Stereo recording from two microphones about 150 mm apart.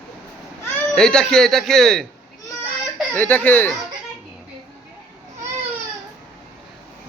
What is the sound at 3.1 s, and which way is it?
Speech, 10° left (ahead or behind).